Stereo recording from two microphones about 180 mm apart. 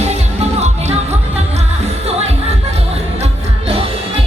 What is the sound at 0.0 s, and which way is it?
Music, 40° right (ahead or behind).